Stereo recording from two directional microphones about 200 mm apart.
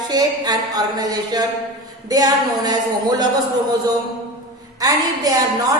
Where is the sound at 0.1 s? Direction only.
20° right (ahead or behind).